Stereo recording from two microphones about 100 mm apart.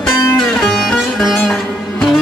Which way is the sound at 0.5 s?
Centre (ahead or behind).